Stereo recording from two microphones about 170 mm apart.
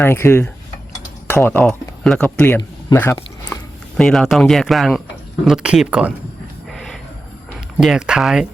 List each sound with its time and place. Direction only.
0.0 s speech: 15° left (ahead or behind)
3.9 s speech: 5° left (ahead or behind)
6.7 s a sound: centre (ahead or behind)
7.8 s speech: 5° right (ahead or behind)